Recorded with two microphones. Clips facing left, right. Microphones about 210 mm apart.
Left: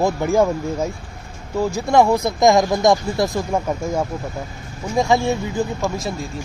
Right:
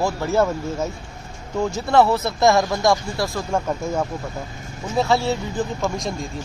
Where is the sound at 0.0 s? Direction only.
15° left (ahead or behind).